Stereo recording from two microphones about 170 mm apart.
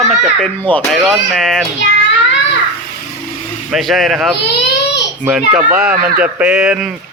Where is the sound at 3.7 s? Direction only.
Centre (ahead or behind).